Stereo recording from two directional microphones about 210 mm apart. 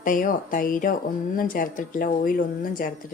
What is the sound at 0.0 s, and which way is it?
Speech, 40° left (ahead or behind).